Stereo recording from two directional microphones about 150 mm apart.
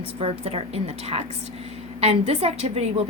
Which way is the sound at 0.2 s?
45° right (ahead or behind).